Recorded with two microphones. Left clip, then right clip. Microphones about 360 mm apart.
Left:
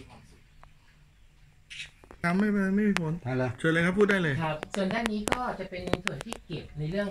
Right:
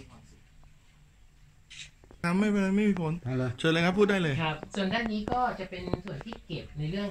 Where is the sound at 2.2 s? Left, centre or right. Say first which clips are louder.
Left 1 dB; centre.